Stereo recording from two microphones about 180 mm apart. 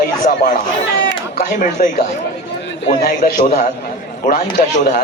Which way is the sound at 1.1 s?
60° left (ahead or behind).